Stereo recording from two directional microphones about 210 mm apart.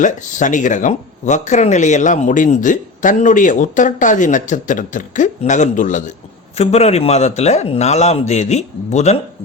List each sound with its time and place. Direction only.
0.0 s speech: 35° left (ahead or behind)